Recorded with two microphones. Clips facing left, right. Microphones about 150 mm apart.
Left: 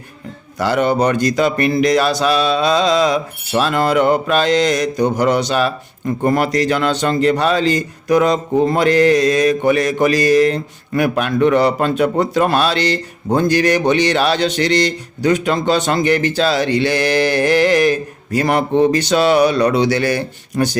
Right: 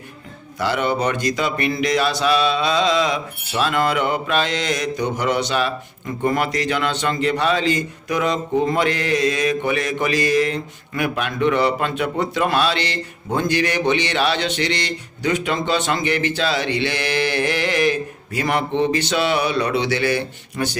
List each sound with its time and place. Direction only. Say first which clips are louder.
0.6 s a man's voice: left 5 dB; 45° left (ahead or behind)